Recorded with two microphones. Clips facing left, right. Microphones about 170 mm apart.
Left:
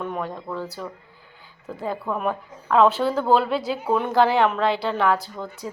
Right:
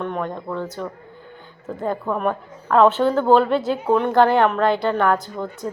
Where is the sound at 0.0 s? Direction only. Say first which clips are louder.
Right 3 dB; 5° left (ahead or behind).